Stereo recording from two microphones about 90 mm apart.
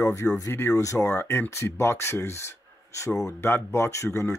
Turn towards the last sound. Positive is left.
turn(degrees=30)  # may be behind; listen again after turning